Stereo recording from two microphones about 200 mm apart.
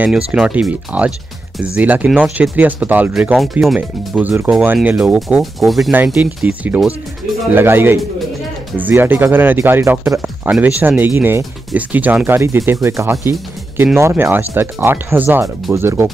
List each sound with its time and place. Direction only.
0.3 s speech: 5° right (ahead or behind)